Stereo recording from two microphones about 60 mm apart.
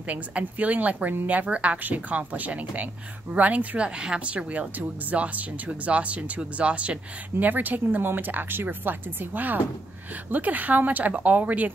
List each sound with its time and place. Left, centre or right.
0.0 s a woman's voice: right